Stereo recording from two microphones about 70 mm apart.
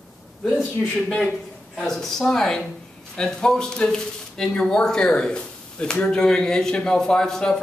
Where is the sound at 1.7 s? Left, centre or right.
Centre.